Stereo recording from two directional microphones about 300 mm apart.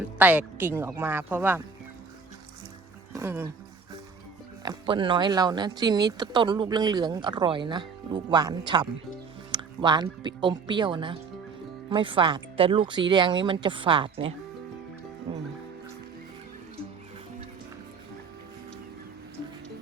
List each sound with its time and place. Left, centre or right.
0.2 s speech: centre
3.1 s speech: centre
4.6 s speech: centre